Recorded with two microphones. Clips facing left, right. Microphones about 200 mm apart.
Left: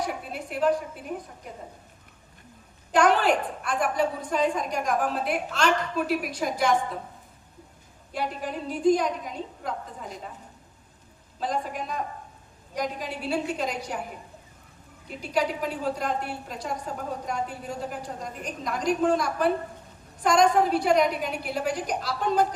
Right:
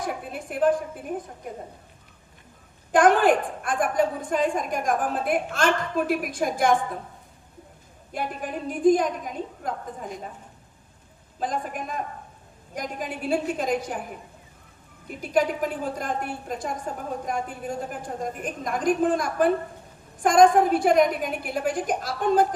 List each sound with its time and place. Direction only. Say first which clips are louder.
0.0 s a woman's voice: even; 50° right (ahead or behind)
2.9 s a woman's voice: right 3 dB; 50° right (ahead or behind)
8.1 s a woman's voice: even; 50° right (ahead or behind)
11.3 s a woman's voice: even; 50° right (ahead or behind)
15.0 s a woman's voice: right 3 dB; 50° right (ahead or behind)